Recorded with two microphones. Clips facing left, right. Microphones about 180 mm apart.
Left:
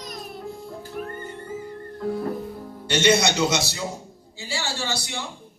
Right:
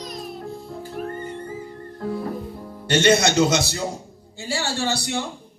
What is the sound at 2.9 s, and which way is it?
A man's voice, 55° right (ahead or behind).